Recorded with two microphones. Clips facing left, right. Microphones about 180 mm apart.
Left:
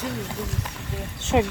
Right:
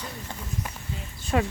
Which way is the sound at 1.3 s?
15° left (ahead or behind).